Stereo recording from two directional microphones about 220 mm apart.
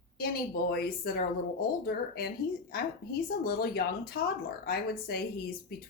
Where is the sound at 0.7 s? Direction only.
45° left (ahead or behind).